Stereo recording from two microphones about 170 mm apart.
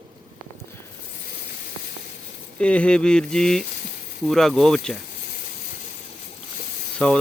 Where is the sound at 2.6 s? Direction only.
5° left (ahead or behind).